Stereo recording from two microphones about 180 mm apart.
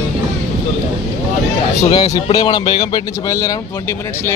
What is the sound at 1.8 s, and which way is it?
Speech, 20° left (ahead or behind).